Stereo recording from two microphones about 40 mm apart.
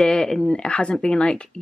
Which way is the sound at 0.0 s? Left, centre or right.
Centre.